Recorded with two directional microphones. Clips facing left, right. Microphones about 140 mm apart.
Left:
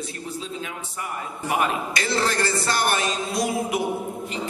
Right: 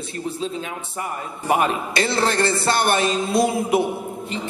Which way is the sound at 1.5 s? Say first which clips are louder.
Right 4 dB; 30° right (ahead or behind).